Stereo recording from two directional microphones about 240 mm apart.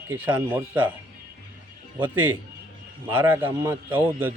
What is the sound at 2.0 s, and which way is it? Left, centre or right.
Speech, centre.